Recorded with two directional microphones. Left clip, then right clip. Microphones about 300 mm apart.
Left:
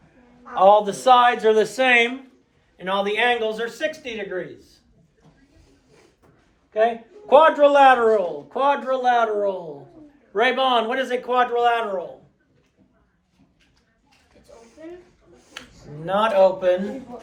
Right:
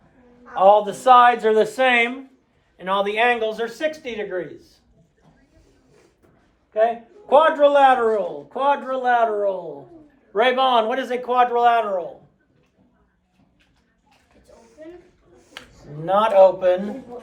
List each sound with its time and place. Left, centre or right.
0.5 s speech: centre; by 4.5 s right
6.7 s a man's voice: centre
10.3 s speech: right
16.0 s speech: right